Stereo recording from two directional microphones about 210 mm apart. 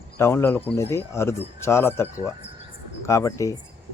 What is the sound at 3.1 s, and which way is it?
Speech, 15° left (ahead or behind).